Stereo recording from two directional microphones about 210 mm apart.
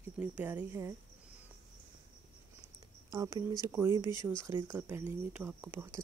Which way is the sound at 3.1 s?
15° right (ahead or behind).